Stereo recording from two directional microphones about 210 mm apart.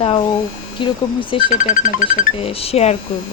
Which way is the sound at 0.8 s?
25° left (ahead or behind).